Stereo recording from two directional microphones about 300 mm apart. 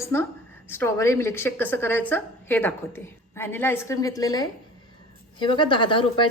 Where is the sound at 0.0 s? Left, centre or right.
Centre.